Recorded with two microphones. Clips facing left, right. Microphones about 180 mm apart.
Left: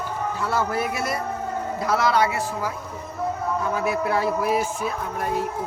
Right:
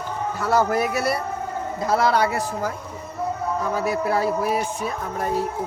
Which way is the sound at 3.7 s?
40° right (ahead or behind).